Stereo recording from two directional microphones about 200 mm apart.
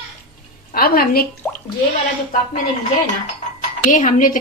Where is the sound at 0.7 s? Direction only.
45° left (ahead or behind).